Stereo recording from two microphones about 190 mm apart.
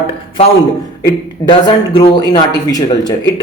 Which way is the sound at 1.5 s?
25° left (ahead or behind).